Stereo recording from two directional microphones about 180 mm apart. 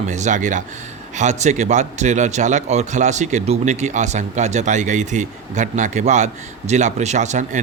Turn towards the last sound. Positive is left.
turn(degrees=-40)  # may be behind; listen again after turning